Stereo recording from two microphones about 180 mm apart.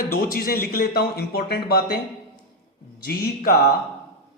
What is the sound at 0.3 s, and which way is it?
A man's voice, 55° left (ahead or behind).